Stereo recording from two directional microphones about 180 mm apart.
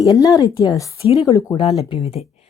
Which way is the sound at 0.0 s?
20° left (ahead or behind).